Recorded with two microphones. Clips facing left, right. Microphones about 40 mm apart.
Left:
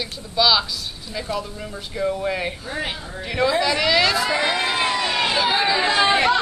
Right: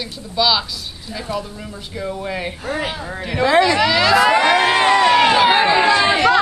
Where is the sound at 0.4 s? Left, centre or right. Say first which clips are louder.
Right 1 dB; centre.